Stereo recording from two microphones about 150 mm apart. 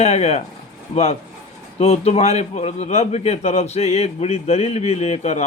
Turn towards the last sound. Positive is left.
turn(degrees=45)  # may be behind; listen again after turning